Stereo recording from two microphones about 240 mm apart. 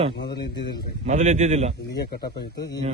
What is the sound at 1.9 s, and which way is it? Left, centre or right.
Speech, left.